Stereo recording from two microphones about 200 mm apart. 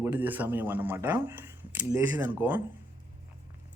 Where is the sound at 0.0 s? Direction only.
10° right (ahead or behind).